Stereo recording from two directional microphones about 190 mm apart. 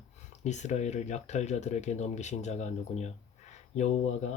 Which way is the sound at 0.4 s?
40° left (ahead or behind).